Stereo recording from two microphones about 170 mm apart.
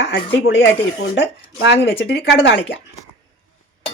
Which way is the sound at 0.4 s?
90° left.